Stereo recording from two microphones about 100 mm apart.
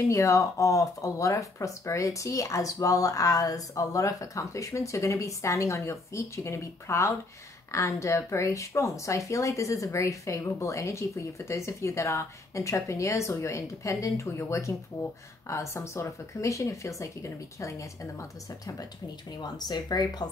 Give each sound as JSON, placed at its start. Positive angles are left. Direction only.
{"t": 0.1, "sound": "speech", "side_deg": 30}
{"t": 19.4, "sound": "speech", "side_deg": 45}